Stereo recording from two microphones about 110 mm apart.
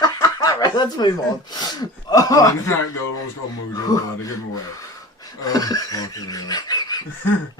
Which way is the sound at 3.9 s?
35° left (ahead or behind).